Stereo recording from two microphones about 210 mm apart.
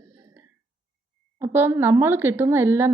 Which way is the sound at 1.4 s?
10° right (ahead or behind).